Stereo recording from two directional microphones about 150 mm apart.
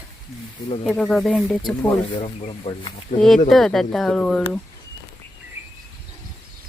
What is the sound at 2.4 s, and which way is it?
Speech, 45° left (ahead or behind).